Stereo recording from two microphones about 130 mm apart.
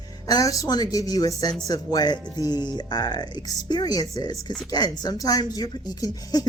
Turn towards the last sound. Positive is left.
turn(degrees=30)  # may be behind; listen again after turning